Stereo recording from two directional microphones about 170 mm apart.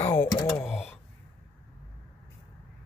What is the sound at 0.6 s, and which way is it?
Speech, centre (ahead or behind).